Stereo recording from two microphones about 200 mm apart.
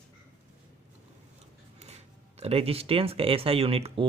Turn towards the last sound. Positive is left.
turn(degrees=-30)  # may be behind; listen again after turning